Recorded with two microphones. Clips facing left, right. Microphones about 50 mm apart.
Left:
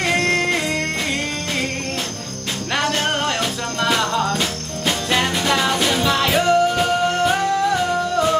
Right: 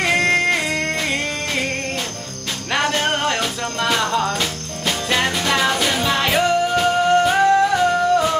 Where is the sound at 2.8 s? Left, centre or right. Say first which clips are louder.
Right 1 dB; centre.